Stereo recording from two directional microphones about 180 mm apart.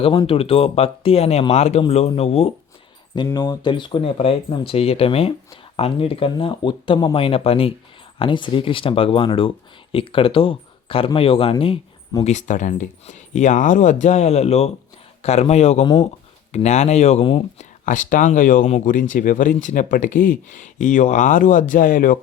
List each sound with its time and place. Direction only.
0.0 s speech: 30° left (ahead or behind)
3.2 s speech: 20° left (ahead or behind); by 22.2 s 50° left (ahead or behind)